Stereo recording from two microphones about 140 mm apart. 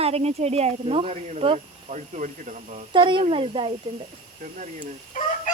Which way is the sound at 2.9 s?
35° right (ahead or behind).